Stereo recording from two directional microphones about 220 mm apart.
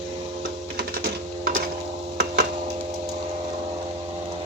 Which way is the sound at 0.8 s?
45° right (ahead or behind).